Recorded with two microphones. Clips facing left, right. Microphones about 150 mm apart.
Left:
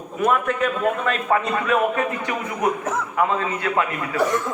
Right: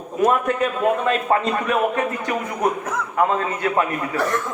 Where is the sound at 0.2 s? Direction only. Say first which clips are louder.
Right 2 dB; 35° right (ahead or behind).